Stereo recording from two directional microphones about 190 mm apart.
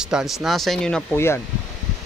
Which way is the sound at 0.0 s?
Centre (ahead or behind).